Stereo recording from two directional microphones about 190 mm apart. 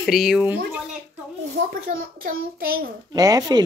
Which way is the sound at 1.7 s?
50° right (ahead or behind).